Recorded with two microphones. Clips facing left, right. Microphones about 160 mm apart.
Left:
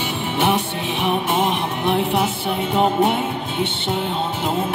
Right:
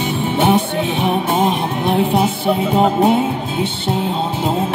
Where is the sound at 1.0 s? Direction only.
40° right (ahead or behind).